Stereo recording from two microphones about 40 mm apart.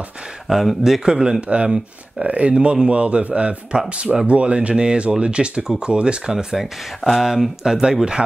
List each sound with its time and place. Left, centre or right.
0.5 s speech: centre
1.5 s a man's voice: right
5.6 s speech: centre
5.9 s speech: right
6.3 s speech: centre